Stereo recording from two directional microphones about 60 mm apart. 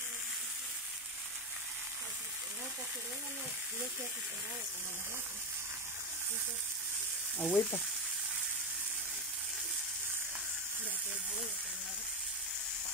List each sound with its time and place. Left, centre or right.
7.3 s speech: left